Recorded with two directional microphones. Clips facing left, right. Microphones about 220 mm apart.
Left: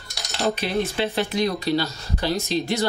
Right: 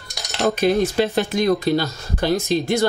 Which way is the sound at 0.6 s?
45° right (ahead or behind).